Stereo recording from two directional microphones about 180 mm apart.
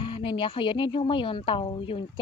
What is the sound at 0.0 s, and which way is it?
A woman's voice, 30° left (ahead or behind).